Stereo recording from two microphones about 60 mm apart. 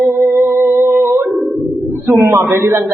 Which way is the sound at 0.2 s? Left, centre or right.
Right.